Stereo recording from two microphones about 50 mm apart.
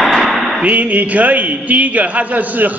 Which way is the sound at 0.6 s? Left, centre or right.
Right.